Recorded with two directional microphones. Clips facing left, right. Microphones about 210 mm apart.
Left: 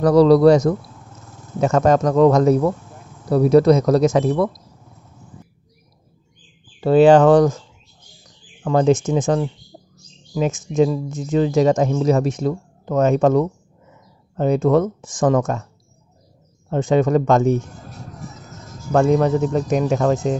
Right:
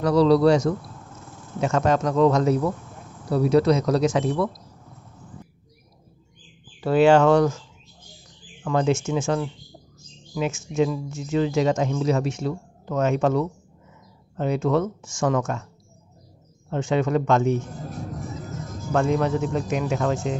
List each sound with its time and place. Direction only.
0.0 s speech: 45° left (ahead or behind)
1.6 s speech: 45° left (ahead or behind)
6.8 s speech: 30° left (ahead or behind)
8.6 s speech: 40° left (ahead or behind)
10.3 s speech: 35° left (ahead or behind)
16.7 s speech: 40° left (ahead or behind)
18.9 s speech: 40° left (ahead or behind)